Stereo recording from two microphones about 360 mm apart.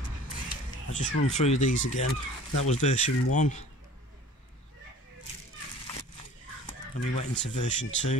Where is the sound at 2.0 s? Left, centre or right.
Left.